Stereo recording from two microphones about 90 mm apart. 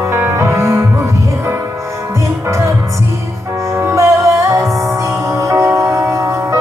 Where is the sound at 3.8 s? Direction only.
35° right (ahead or behind).